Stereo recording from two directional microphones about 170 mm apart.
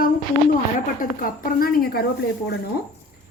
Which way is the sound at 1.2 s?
60° left (ahead or behind).